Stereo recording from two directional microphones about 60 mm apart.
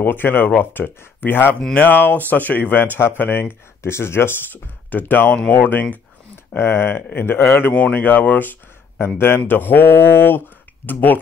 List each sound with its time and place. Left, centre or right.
0.0 s speech: left
1.6 s speech: centre
1.9 s speech: left
6.5 s speech: left
7.7 s speech: left